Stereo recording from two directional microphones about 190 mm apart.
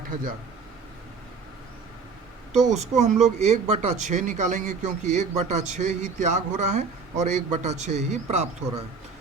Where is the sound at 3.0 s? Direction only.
35° right (ahead or behind).